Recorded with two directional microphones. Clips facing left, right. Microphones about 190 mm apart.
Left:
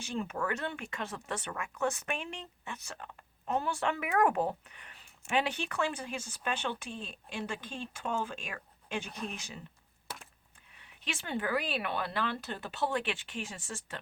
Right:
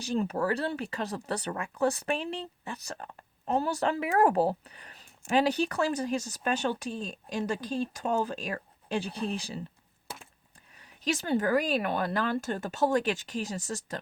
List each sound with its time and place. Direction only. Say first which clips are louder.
0.0 s speech: right 6 dB; 35° right (ahead or behind)
10.8 s speech: right 10 dB; 40° right (ahead or behind)